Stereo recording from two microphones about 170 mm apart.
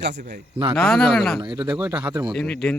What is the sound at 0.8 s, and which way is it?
Speech, centre (ahead or behind).